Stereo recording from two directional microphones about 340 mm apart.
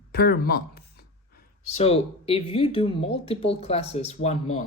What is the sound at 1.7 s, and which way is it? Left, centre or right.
Speech, centre.